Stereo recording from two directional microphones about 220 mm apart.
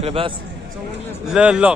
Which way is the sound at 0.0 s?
25° right (ahead or behind).